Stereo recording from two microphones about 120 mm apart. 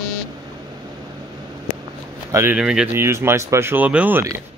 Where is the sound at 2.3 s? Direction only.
20° right (ahead or behind).